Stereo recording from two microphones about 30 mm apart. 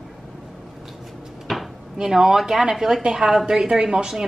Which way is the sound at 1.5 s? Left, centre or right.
Centre.